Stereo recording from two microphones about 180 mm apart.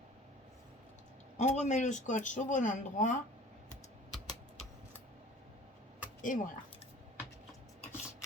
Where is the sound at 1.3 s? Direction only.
40° left (ahead or behind).